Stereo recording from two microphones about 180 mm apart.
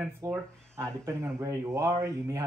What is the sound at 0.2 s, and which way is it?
Speech, 15° right (ahead or behind).